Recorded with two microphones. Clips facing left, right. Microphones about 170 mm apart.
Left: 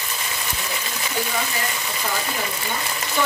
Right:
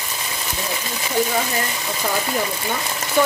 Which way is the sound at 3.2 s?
15° right (ahead or behind).